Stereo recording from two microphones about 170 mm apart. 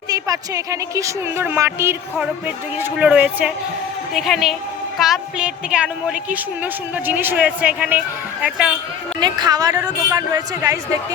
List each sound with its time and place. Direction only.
0.1 s a woman's voice: 20° right (ahead or behind)
9.2 s a woman's voice: 25° right (ahead or behind)